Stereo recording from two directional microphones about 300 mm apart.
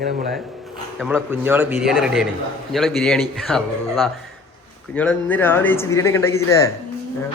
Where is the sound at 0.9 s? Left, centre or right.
Centre.